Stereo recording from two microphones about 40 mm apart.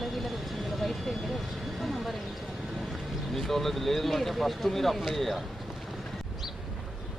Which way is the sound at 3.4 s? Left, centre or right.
Centre.